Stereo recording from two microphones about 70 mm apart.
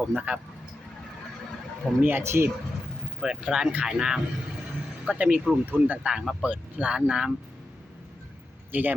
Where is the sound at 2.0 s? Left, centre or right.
Right.